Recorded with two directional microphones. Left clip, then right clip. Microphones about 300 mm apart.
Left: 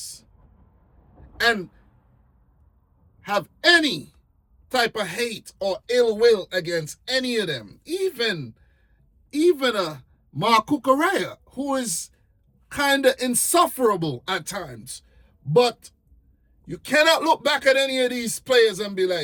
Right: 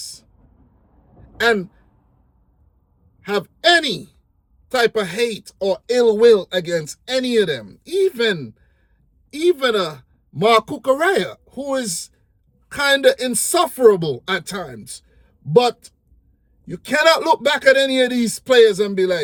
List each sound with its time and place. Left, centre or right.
3.2 s speech: centre